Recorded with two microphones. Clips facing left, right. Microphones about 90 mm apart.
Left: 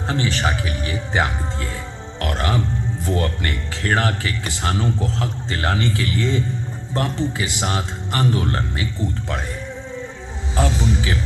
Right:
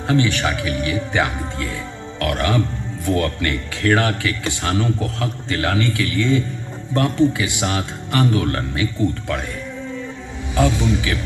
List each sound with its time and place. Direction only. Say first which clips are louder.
0.1 s a man's voice: right 4 dB; 30° left (ahead or behind)
10.5 s a man's voice: right 3 dB; 30° left (ahead or behind)